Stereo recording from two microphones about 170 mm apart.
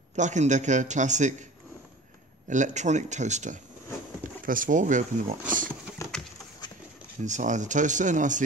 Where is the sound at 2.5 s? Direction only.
45° right (ahead or behind).